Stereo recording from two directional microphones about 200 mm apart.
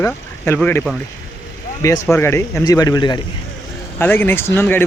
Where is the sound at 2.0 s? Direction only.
10° left (ahead or behind).